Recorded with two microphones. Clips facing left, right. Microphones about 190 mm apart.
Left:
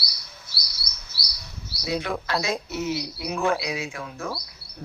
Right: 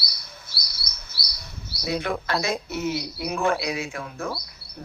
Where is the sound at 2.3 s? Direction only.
55° right (ahead or behind).